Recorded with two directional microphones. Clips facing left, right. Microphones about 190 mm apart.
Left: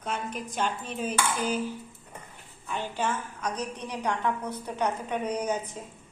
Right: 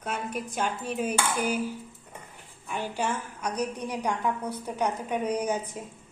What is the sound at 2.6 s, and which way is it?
A woman's voice, 10° right (ahead or behind).